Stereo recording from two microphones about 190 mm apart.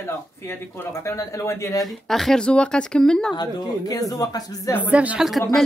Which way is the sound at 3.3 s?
20° left (ahead or behind).